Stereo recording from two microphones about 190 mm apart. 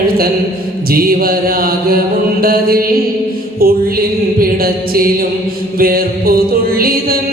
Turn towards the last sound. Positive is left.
turn(degrees=-50)  # may be behind; listen again after turning